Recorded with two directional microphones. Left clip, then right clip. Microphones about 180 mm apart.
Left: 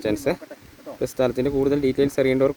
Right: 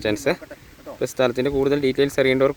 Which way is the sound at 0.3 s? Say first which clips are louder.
Right 2 dB; 5° left (ahead or behind).